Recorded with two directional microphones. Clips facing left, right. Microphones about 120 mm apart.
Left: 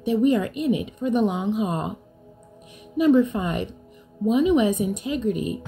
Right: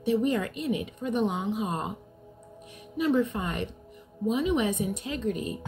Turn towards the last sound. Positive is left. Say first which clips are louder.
# left 6 dB
turn(degrees=15)  # may be behind; listen again after turning